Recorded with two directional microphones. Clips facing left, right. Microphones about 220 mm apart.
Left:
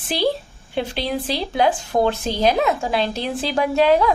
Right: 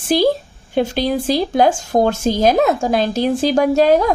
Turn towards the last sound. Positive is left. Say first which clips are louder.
# right 3 dB
turn(degrees=-45)  # may be behind; listen again after turning